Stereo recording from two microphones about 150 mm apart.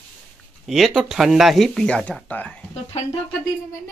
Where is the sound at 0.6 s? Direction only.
Centre (ahead or behind).